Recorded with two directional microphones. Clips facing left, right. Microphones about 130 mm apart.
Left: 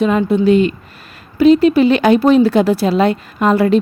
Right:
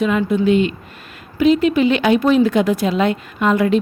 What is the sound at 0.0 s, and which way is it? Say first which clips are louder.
A woman's voice: left 3 dB; 35° left (ahead or behind).